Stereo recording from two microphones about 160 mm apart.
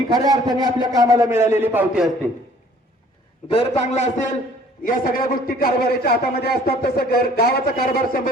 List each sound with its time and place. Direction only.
0.1 s a man's voice: 25° right (ahead or behind)
3.5 s a man's voice: 35° left (ahead or behind)
4.8 s a man's voice: 60° left (ahead or behind)